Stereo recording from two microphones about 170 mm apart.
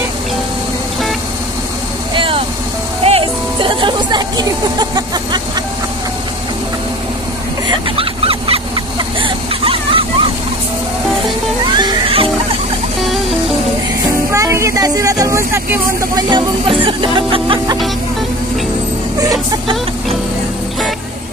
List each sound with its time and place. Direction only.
2.1 s vehicle: 30° right (ahead or behind)
3.0 s music: 35° right (ahead or behind)
7.9 s a sound: 35° right (ahead or behind)
11.6 s music: 25° right (ahead or behind)
14.3 s vehicle: 15° right (ahead or behind)
16.3 s music: 30° right (ahead or behind)